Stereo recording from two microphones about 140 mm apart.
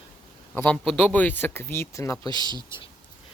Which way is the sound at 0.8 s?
10° left (ahead or behind).